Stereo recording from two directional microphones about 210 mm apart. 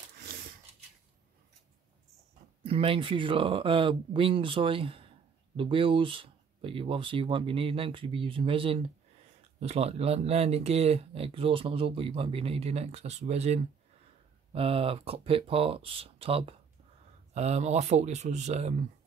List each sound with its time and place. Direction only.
2.6 s speech: 25° right (ahead or behind)